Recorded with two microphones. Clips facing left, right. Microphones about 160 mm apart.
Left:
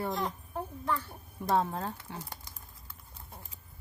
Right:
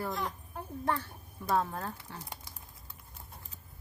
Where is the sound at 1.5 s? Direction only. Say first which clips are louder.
Left 2 dB; 25° left (ahead or behind).